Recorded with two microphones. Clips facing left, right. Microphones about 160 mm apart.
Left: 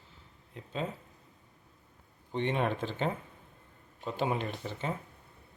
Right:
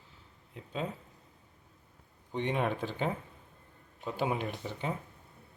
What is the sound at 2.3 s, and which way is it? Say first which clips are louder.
Speech: left 1 dB; 10° right (ahead or behind).